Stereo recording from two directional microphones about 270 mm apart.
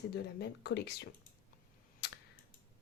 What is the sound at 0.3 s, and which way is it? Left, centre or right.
Speech, left.